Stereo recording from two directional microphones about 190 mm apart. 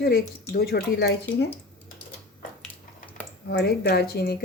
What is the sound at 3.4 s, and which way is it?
Speech, 55° left (ahead or behind).